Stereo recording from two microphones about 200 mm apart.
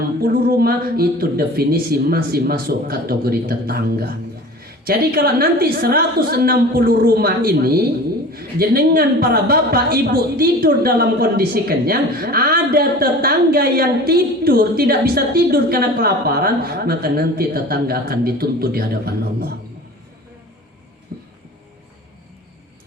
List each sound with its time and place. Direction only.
0.2 s a woman's voice: 50° right (ahead or behind)